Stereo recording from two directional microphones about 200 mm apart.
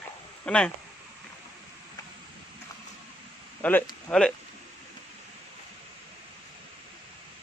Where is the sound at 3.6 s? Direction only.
10° left (ahead or behind).